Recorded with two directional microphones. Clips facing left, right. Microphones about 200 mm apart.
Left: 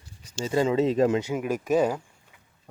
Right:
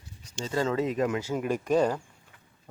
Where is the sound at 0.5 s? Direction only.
15° left (ahead or behind).